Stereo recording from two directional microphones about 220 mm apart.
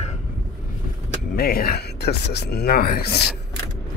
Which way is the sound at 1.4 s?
45° left (ahead or behind).